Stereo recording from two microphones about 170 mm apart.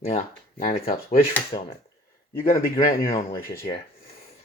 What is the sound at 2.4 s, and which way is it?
Speech, 60° left (ahead or behind).